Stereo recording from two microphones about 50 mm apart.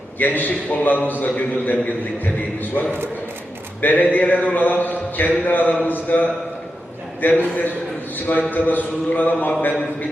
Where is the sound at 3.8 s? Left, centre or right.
Left.